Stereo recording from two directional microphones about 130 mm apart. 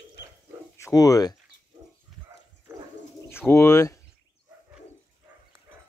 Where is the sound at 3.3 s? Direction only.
20° left (ahead or behind).